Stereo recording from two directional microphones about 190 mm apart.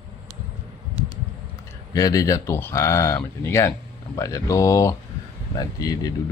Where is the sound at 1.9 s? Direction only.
20° left (ahead or behind).